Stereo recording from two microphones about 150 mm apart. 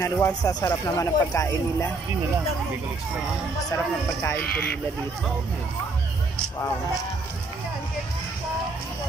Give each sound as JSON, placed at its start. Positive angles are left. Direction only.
{"t": 0.0, "sound": "speech", "side_deg": 20}
{"t": 3.7, "sound": "speech", "side_deg": 20}